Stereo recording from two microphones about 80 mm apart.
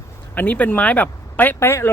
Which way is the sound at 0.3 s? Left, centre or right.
Centre.